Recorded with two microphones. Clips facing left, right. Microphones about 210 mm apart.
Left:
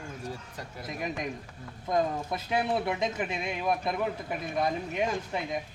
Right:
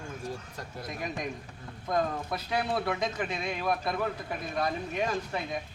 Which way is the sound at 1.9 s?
20° left (ahead or behind).